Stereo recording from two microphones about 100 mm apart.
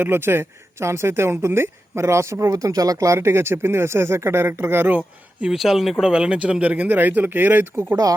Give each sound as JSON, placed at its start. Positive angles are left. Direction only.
{"t": 0.0, "sound": "speech", "side_deg": -20}